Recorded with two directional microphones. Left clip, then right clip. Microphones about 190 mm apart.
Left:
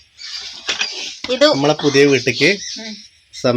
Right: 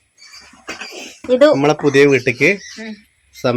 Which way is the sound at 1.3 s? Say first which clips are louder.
Right 3 dB; 55° right (ahead or behind).